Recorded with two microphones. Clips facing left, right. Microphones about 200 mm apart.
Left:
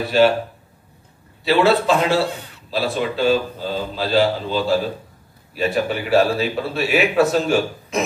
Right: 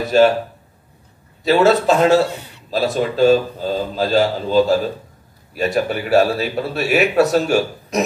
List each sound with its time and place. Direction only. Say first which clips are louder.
0.0 s a man's voice: right 2 dB; 45° right (ahead or behind)
1.4 s a man's voice: right 2 dB; 45° right (ahead or behind)